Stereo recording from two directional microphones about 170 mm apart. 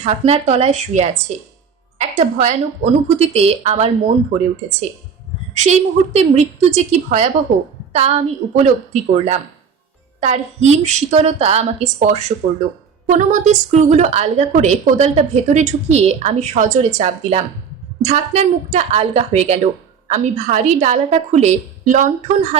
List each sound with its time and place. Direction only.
0.0 s a woman's voice: 40° right (ahead or behind)
5.5 s a woman's voice: 45° right (ahead or behind)
12.4 s a woman's voice: 55° right (ahead or behind)